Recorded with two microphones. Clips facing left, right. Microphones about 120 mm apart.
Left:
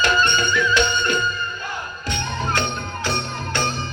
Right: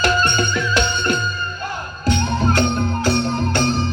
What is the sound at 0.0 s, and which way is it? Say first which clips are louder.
Music: right 1 dB; 40° right (ahead or behind).